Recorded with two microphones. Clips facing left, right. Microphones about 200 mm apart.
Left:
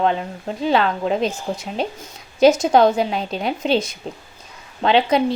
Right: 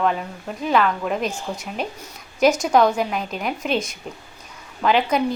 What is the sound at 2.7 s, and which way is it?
A woman's voice, 30° left (ahead or behind).